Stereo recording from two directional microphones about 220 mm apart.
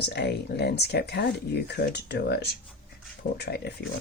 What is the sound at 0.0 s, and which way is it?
Speech, 50° left (ahead or behind).